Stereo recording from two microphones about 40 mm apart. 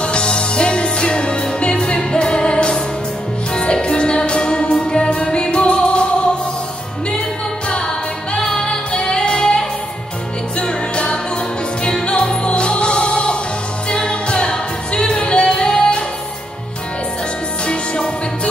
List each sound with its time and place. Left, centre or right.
0.0 s music: left
7.7 s music: left
17.6 s music: left